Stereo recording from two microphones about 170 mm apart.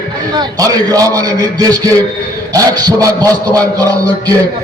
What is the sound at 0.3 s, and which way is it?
A man's voice, 20° right (ahead or behind).